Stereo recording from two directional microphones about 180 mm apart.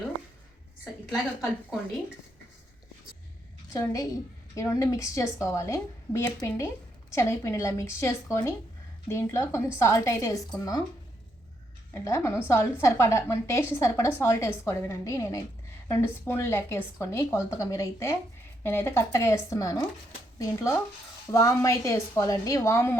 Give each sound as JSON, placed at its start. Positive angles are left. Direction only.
{"t": 1.1, "sound": "a woman's voice", "side_deg": -5}
{"t": 3.7, "sound": "a woman's voice", "side_deg": 20}
{"t": 12.0, "sound": "a woman's voice", "side_deg": 15}